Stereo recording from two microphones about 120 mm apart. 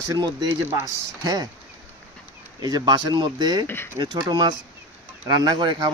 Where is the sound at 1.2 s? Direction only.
30° right (ahead or behind).